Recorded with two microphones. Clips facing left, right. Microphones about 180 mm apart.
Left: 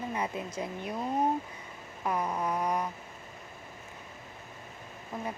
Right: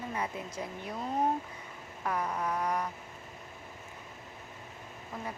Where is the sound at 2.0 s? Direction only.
15° left (ahead or behind).